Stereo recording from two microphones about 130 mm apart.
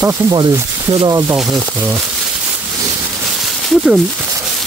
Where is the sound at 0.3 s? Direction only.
35° right (ahead or behind).